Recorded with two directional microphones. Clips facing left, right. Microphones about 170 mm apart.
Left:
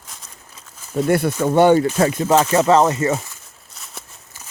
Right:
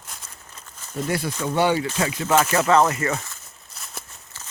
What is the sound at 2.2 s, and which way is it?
Speech, 25° left (ahead or behind).